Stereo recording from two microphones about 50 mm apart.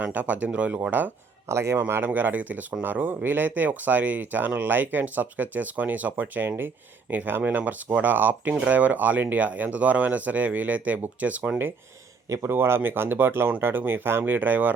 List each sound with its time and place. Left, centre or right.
0.0 s speech: right
0.8 s speech: right
1.5 s speech: right
2.0 s speech: right
12.5 s speech: right